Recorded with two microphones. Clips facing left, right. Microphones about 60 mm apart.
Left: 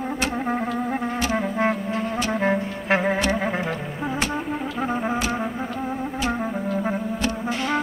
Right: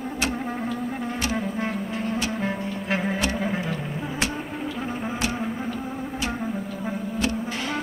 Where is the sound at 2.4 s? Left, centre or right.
Left.